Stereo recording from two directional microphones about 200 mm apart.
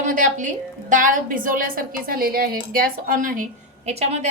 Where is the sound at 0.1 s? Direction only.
40° right (ahead or behind).